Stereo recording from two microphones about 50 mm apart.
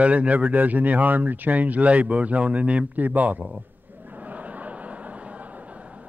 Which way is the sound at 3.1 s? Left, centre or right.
Right.